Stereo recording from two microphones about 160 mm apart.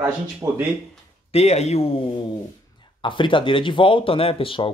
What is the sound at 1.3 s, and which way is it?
Speech, 40° left (ahead or behind).